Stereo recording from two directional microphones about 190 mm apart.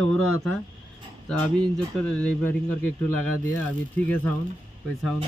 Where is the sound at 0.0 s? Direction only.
5° left (ahead or behind).